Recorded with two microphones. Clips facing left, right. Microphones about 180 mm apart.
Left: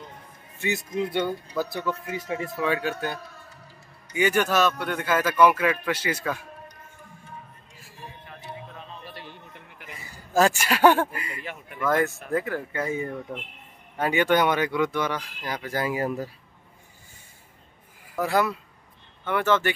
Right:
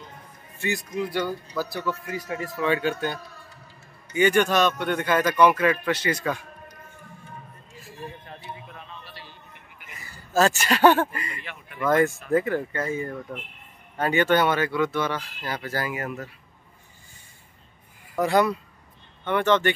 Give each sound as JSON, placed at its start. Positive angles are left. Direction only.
{"t": 0.6, "sound": "speech", "side_deg": 20}
{"t": 2.5, "sound": "speech", "side_deg": 5}
{"t": 8.9, "sound": "a sound", "side_deg": 50}
{"t": 10.1, "sound": "speech", "side_deg": 10}
{"t": 12.8, "sound": "speech", "side_deg": 15}
{"t": 15.9, "sound": "speech", "side_deg": 30}
{"t": 18.1, "sound": "speech", "side_deg": 0}